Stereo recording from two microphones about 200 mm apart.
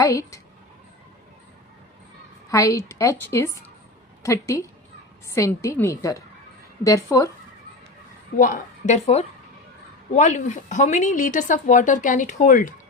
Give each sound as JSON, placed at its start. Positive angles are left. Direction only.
{"t": 0.0, "sound": "a woman's voice", "side_deg": 15}
{"t": 2.5, "sound": "a woman's voice", "side_deg": 15}
{"t": 8.4, "sound": "speech", "side_deg": 40}